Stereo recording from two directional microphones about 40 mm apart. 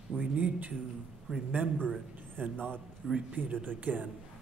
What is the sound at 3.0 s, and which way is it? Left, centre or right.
Speech, centre.